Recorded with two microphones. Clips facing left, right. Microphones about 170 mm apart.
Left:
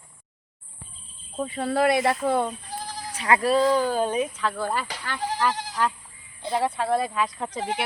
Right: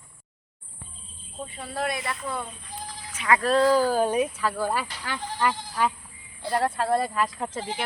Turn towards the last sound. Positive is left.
turn(degrees=0)  # may be behind; listen again after turning